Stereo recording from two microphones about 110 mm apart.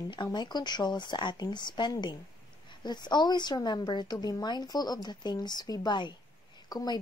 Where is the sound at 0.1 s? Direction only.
45° left (ahead or behind).